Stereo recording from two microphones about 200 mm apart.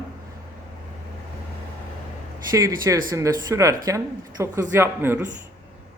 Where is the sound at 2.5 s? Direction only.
15° right (ahead or behind).